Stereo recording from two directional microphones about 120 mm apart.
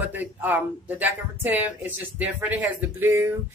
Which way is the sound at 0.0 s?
15° right (ahead or behind).